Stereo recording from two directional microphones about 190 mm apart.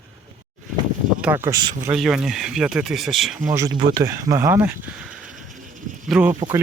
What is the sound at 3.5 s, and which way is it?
Speech, 20° right (ahead or behind).